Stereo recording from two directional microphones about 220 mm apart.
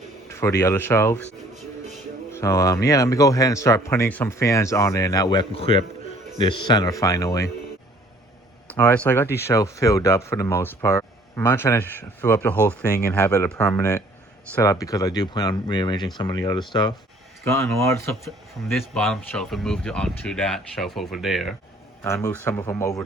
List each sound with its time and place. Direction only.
0.3 s speech: 10° left (ahead or behind)
2.3 s speech: 15° left (ahead or behind)
8.7 s speech: 10° left (ahead or behind)
18.7 s speech: centre (ahead or behind)
22.0 s speech: 10° left (ahead or behind)